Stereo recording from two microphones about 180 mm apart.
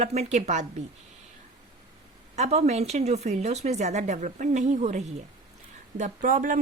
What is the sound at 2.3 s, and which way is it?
A woman's voice, 35° right (ahead or behind).